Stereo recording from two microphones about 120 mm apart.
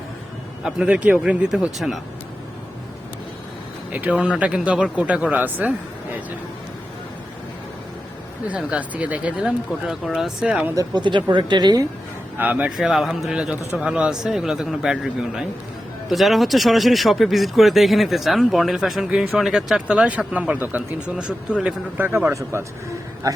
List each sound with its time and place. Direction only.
0.6 s speech: 10° right (ahead or behind)
3.9 s speech: 10° right (ahead or behind)
8.4 s speech: 10° right (ahead or behind)
10.8 s speech: 40° right (ahead or behind)
12.4 s a man's voice: 15° right (ahead or behind)